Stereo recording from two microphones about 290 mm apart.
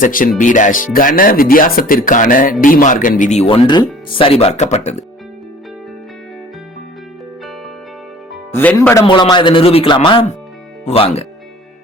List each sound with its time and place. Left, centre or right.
0.0 s speech: left
8.3 s a man's voice: centre